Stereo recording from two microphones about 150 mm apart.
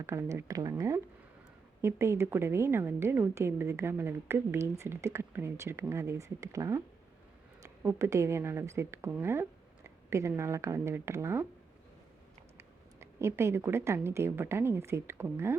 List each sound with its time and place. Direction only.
0.0 s a woman's voice: 20° right (ahead or behind)
12.5 s a woman's voice: 20° right (ahead or behind)